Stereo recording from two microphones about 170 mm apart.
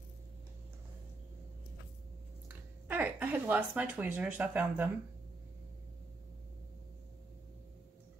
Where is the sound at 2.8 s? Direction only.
10° right (ahead or behind).